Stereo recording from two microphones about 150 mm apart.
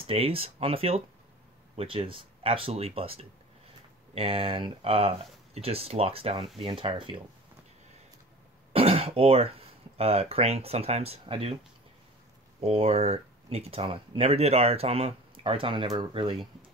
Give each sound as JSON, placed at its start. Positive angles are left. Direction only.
{"t": 0.0, "sound": "speech", "side_deg": -40}
{"t": 8.7, "sound": "speech", "side_deg": -40}
{"t": 12.5, "sound": "speech", "side_deg": -45}